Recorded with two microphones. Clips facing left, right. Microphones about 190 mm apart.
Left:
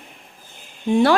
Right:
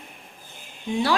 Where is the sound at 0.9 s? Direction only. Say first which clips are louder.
Left 8 dB; 55° left (ahead or behind).